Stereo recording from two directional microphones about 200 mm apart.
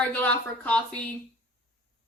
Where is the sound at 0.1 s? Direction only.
10° left (ahead or behind).